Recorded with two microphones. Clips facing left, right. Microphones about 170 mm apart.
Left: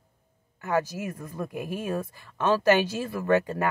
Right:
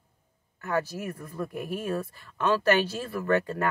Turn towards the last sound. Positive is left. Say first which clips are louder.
# left 2 dB
turn(degrees=15)  # may be behind; listen again after turning